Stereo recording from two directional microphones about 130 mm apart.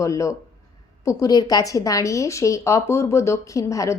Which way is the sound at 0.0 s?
25° left (ahead or behind).